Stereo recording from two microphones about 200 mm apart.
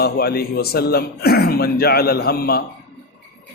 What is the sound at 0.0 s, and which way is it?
A man's voice, 50° left (ahead or behind).